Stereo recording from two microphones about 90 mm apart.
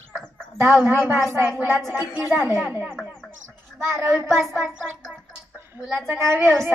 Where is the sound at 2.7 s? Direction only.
25° right (ahead or behind).